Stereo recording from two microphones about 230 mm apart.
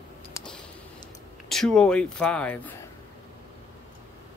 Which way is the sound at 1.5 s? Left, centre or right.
Centre.